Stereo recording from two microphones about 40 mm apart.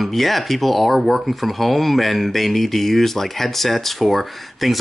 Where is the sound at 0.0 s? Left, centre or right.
Centre.